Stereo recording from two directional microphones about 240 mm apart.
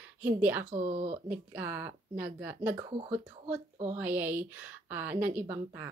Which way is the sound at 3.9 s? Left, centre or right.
Centre.